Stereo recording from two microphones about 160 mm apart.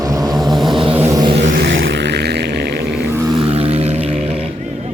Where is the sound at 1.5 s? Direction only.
90° right.